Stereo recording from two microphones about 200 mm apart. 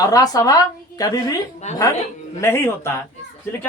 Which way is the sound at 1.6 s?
35° left (ahead or behind).